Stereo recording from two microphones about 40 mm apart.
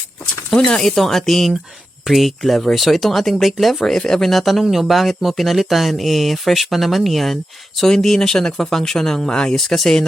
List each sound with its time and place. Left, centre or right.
0.5 s speech: centre
0.9 s speech: centre
3.9 s speech: centre
7.8 s speech: centre